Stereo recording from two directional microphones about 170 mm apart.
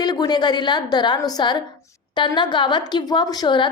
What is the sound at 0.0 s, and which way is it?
A woman's voice, 25° left (ahead or behind).